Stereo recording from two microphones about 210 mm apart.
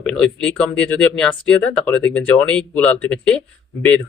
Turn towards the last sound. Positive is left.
turn(degrees=5)  # may be behind; listen again after turning